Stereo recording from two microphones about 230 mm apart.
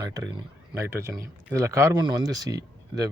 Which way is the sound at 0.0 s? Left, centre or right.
Centre.